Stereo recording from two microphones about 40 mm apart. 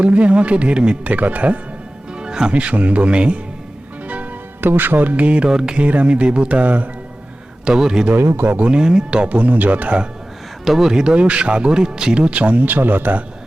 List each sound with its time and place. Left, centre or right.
0.0 s speech: right
1.0 s speech: right
2.1 s music: right
2.5 s speech: right
4.6 s music: right
5.5 s music: centre
5.7 s speech: right
6.6 s speech: right
7.6 s a man's voice: centre
8.1 s speech: right
8.7 s speech: centre
9.3 s speech: right
10.7 s speech: centre; by 12.6 s right
12.6 s music: right